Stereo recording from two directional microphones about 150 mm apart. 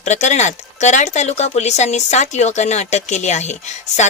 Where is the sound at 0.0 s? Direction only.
50° left (ahead or behind).